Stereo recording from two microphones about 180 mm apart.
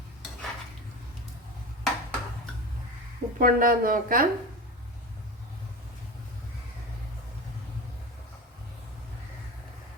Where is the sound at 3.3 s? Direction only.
50° right (ahead or behind).